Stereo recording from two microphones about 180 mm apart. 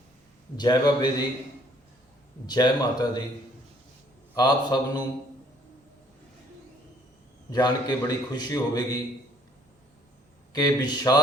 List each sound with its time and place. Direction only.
0.5 s a man's voice: 25° left (ahead or behind)
2.5 s a man's voice: 20° left (ahead or behind)
4.4 s a man's voice: 20° left (ahead or behind)
7.5 s a man's voice: 20° left (ahead or behind)
10.5 s a man's voice: 20° left (ahead or behind)